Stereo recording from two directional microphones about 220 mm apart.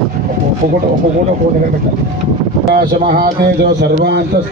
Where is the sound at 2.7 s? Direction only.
45° right (ahead or behind).